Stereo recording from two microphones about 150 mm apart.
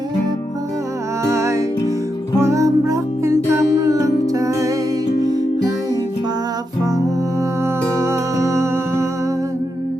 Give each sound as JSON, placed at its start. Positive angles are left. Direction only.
{"t": 1.2, "sound": "music", "side_deg": -20}
{"t": 8.0, "sound": "music", "side_deg": -20}